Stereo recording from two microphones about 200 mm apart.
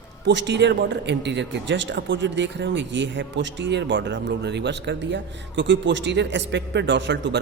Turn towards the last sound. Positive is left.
turn(degrees=-60)  # may be behind; listen again after turning